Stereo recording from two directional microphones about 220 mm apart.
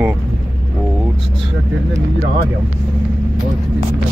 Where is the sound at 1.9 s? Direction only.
45° right (ahead or behind).